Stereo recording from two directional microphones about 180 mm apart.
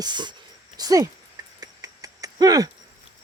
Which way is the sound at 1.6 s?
20° right (ahead or behind).